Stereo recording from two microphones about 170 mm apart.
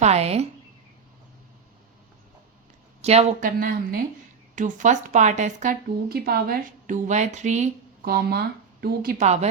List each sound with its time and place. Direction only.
0.0 s a woman's voice: 40° right (ahead or behind)
3.0 s a woman's voice: 40° right (ahead or behind)
3.6 s speech: 55° right (ahead or behind)
8.0 s speech: 65° right (ahead or behind)
9.2 s a woman's voice: 40° right (ahead or behind)